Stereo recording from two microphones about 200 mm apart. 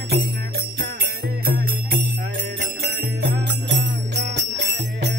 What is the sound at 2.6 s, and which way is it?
Jingle bell, 55° right (ahead or behind).